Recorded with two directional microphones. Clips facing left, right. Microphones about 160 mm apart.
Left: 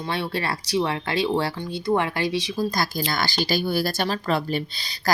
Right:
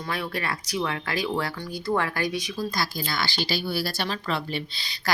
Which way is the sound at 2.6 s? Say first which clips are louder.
Left 5 dB; 45° left (ahead or behind).